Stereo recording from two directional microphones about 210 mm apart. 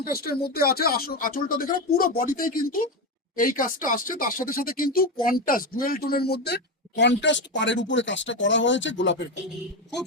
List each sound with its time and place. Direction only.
0.2 s speech: 45° left (ahead or behind)